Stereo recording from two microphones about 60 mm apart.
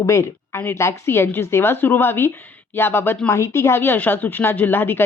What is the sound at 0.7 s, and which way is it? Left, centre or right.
Speech, left.